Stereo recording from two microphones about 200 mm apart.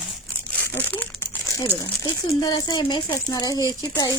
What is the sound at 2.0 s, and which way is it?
A woman's voice, 20° left (ahead or behind).